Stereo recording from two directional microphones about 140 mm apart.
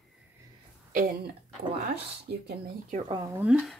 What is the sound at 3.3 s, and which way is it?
Speech, 5° right (ahead or behind).